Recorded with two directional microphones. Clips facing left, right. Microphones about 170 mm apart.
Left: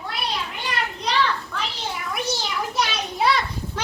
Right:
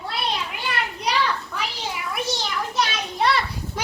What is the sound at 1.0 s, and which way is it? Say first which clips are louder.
Children playing: left 1 dB; 10° right (ahead or behind).